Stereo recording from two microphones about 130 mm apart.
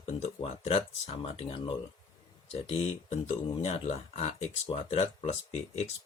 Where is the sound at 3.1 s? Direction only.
55° left (ahead or behind).